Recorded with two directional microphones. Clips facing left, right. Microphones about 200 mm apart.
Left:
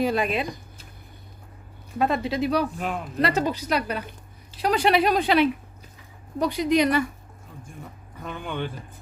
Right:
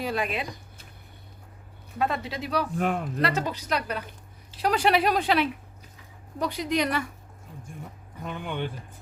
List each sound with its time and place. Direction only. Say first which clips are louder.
0.0 s speech: left 5 dB; 25° left (ahead or behind)
2.0 s speech: left 5 dB; 20° left (ahead or behind)
2.7 s speech: right 3 dB; 55° right (ahead or behind)
3.2 s a woman's voice: left 4 dB; 15° left (ahead or behind)
8.2 s speech: left 1 dB; 15° right (ahead or behind)